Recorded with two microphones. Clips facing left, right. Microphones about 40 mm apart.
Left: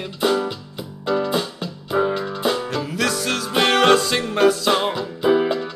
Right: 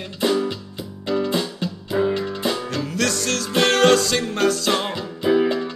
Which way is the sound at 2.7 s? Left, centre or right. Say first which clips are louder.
Left 1 dB; centre.